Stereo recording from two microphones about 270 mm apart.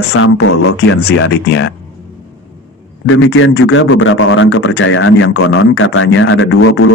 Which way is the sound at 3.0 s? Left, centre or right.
Left.